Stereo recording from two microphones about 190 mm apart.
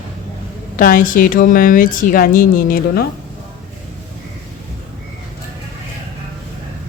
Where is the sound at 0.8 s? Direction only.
45° left (ahead or behind).